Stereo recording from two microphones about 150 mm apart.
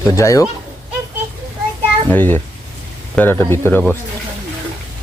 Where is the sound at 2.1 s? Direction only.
10° left (ahead or behind).